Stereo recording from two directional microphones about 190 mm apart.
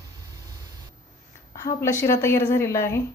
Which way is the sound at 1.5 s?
15° left (ahead or behind).